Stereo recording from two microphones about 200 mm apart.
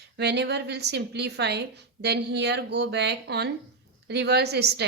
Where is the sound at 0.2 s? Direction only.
55° right (ahead or behind).